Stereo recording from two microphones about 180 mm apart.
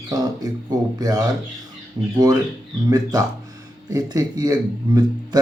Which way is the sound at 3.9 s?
20° right (ahead or behind).